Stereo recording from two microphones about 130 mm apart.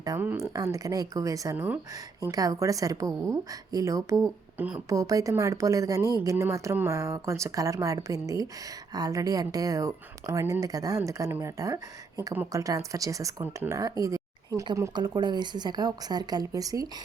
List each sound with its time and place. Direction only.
0.2 s a woman's voice: 15° right (ahead or behind)
0.5 s a woman's voice: 25° right (ahead or behind)
1.5 s a woman's voice: 15° right (ahead or behind)
2.3 s a woman's voice: 25° right (ahead or behind)
4.5 s a woman's voice: 10° right (ahead or behind)
4.9 s a woman's voice: 25° right (ahead or behind)